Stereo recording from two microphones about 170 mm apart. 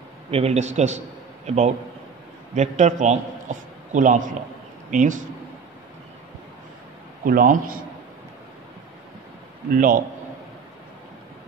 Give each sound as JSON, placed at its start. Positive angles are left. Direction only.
{"t": 0.3, "sound": "a man's voice", "side_deg": -40}
{"t": 7.2, "sound": "a man's voice", "side_deg": -55}
{"t": 9.7, "sound": "a man's voice", "side_deg": -55}